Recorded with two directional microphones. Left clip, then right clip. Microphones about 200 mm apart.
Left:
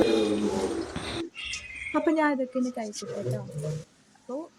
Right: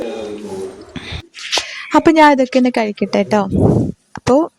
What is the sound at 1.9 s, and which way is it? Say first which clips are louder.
Speech: right 16 dB; 45° right (ahead or behind).